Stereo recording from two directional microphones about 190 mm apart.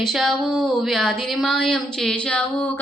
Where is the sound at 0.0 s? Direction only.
Centre (ahead or behind).